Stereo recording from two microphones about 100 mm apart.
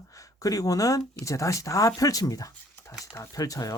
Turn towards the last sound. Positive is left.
turn(degrees=35)  # may be behind; listen again after turning